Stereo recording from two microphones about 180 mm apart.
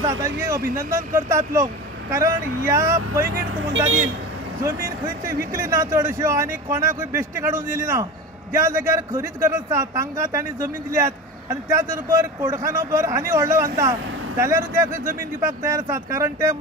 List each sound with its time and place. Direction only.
0.0 s a sound: 20° right (ahead or behind)
0.7 s a man's voice: 15° right (ahead or behind)
3.3 s speech: 65° right (ahead or behind)
4.6 s a man's voice: 15° right (ahead or behind)